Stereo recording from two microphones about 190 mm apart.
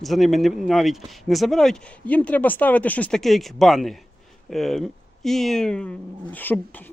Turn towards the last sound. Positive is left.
turn(degrees=10)  # may be behind; listen again after turning